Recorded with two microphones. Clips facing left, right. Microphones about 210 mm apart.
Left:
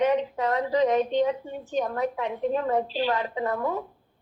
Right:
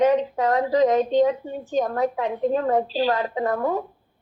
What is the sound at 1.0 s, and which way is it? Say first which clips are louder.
A woman's voice: right 5 dB; 35° right (ahead or behind).